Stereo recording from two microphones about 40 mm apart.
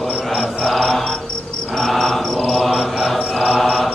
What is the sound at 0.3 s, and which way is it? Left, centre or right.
Mantra, centre.